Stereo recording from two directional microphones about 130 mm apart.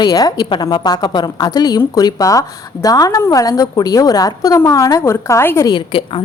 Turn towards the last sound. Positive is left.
turn(degrees=40)  # may be behind; listen again after turning